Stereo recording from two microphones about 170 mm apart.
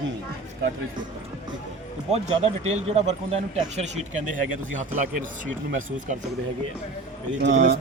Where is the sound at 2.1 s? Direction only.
40° right (ahead or behind).